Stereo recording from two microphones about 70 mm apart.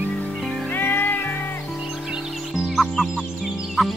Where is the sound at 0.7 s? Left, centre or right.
Left.